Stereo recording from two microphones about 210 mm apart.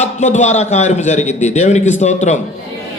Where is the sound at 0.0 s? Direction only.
35° left (ahead or behind).